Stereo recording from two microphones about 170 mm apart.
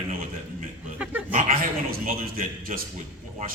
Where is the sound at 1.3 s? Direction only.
55° right (ahead or behind).